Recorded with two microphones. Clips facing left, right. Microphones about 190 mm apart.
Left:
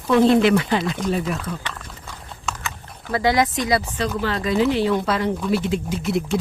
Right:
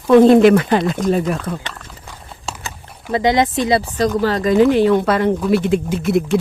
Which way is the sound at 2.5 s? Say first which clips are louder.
Even; 30° right (ahead or behind).